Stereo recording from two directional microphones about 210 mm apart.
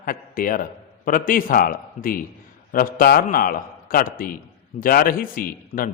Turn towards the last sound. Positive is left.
turn(degrees=40)  # may be behind; listen again after turning